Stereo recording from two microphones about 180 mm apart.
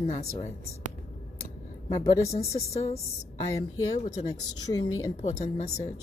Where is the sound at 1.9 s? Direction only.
15° left (ahead or behind).